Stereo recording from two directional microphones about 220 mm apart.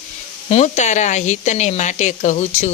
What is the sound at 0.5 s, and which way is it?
A woman's voice, 30° left (ahead or behind).